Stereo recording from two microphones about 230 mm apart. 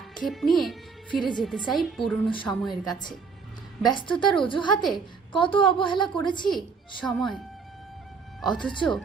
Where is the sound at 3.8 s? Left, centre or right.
Centre.